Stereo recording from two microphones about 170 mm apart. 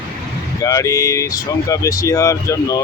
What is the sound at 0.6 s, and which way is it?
Speech, 20° left (ahead or behind).